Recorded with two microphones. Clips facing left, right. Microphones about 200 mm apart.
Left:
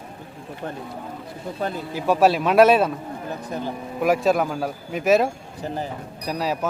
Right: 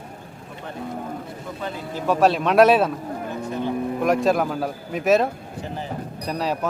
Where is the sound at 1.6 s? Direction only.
50° left (ahead or behind).